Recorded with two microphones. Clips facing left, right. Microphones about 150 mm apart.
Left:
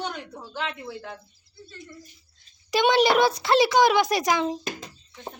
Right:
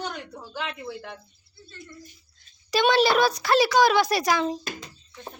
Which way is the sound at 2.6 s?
20° left (ahead or behind).